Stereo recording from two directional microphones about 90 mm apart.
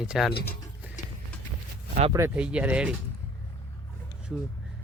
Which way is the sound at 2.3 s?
15° right (ahead or behind).